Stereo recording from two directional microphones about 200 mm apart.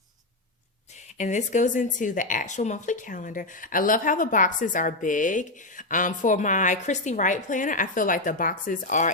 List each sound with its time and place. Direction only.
1.2 s a woman's voice: 35° left (ahead or behind)